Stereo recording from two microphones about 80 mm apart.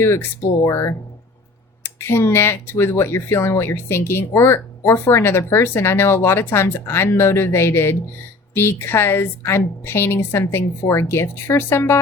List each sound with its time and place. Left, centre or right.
0.0 s speech: left